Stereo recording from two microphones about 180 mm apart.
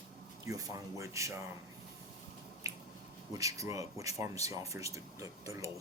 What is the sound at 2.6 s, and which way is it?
Finger snapping, 20° right (ahead or behind).